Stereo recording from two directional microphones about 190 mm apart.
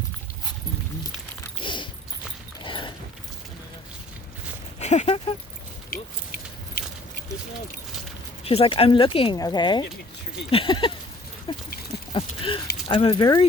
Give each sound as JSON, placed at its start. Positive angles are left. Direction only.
{"t": 1.6, "sound": "a sound", "side_deg": 25}
{"t": 4.8, "sound": "speech", "side_deg": 35}
{"t": 5.9, "sound": "keys jangling", "side_deg": 50}
{"t": 8.4, "sound": "speech", "side_deg": 30}
{"t": 11.5, "sound": "a sound", "side_deg": 25}
{"t": 12.9, "sound": "speech", "side_deg": 25}